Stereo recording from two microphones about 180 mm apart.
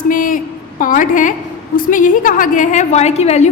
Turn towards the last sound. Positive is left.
turn(degrees=35)  # may be behind; listen again after turning